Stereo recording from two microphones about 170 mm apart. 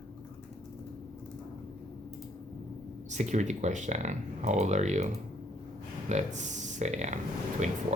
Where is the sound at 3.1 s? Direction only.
45° right (ahead or behind).